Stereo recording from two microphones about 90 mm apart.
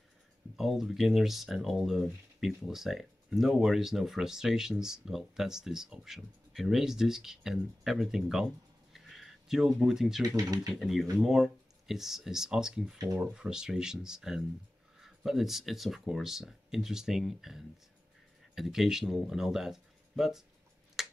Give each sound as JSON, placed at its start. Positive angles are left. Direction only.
{"t": 0.6, "sound": "speech", "side_deg": 0}
{"t": 10.2, "sound": "speech", "side_deg": -40}
{"t": 10.7, "sound": "speech", "side_deg": 0}
{"t": 21.0, "sound": "finger snapping", "side_deg": -5}